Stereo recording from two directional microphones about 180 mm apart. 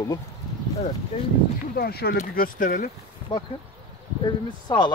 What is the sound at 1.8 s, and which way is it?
Speech, 60° left (ahead or behind).